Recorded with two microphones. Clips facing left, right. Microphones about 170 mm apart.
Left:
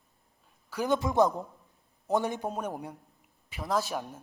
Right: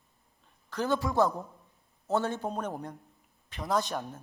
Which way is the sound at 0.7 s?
15° left (ahead or behind).